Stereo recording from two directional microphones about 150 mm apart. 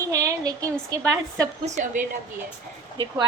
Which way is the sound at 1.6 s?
55° right (ahead or behind).